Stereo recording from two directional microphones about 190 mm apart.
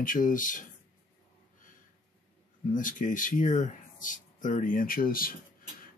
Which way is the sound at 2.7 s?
45° left (ahead or behind).